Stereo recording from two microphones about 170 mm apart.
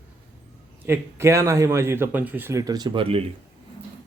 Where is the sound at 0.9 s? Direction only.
15° right (ahead or behind).